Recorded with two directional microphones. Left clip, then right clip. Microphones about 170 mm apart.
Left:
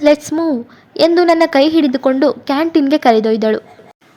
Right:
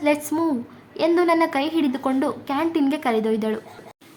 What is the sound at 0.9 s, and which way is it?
A woman's voice, 30° left (ahead or behind).